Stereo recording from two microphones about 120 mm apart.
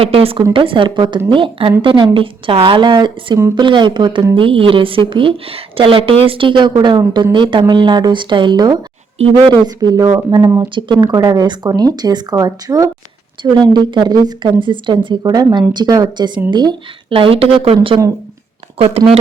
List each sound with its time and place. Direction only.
0.0 s a woman's voice: 55° right (ahead or behind); by 16.7 s 35° right (ahead or behind)
17.1 s speech: 50° right (ahead or behind)
18.8 s speech: 55° right (ahead or behind)